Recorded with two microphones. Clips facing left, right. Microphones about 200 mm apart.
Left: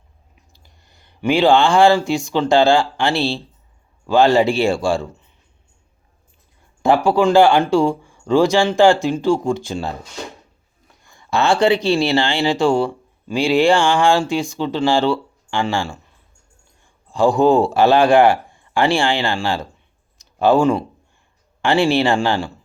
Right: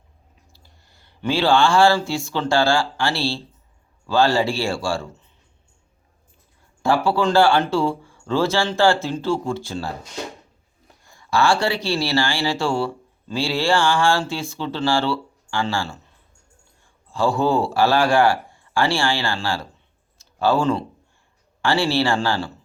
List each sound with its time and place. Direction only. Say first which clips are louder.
0.5 s speech: left 1 dB; 20° left (ahead or behind)
6.8 s speech: left 5 dB; 15° left (ahead or behind)
11.1 s speech: left 2 dB; 20° left (ahead or behind)
20.1 s a sound: left 5 dB; 15° left (ahead or behind)
21.6 s speech: left 4 dB; 20° left (ahead or behind)